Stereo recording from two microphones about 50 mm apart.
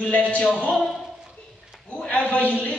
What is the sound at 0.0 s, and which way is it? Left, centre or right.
Speech, left.